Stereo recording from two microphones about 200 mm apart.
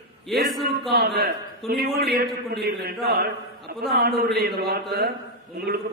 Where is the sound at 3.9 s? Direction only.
50° right (ahead or behind).